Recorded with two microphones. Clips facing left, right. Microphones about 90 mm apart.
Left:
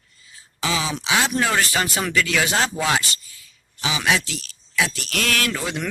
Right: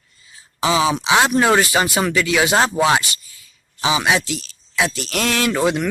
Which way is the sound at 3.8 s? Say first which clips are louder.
Right 4 dB; 20° right (ahead or behind).